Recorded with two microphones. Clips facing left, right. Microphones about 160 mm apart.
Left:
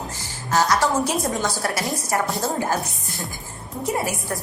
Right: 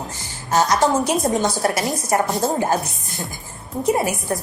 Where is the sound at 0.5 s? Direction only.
20° right (ahead or behind).